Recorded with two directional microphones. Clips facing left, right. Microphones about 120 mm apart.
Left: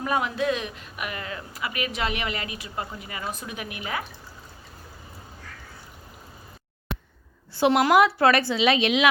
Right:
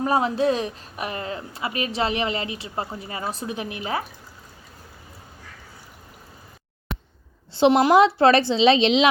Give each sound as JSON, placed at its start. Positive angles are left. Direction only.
{"t": 0.0, "sound": "speech", "side_deg": -30}
{"t": 7.5, "sound": "a woman's voice", "side_deg": -20}